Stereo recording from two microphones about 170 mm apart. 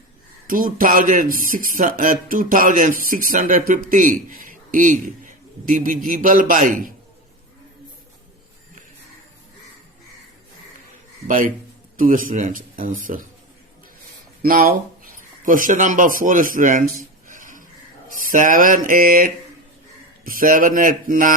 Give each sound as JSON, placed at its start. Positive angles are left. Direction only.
{"t": 0.4, "sound": "speech", "side_deg": -55}
{"t": 11.3, "sound": "speech", "side_deg": -50}
{"t": 14.4, "sound": "speech", "side_deg": -60}
{"t": 17.2, "sound": "a sound", "side_deg": -50}
{"t": 18.3, "sound": "speech", "side_deg": -50}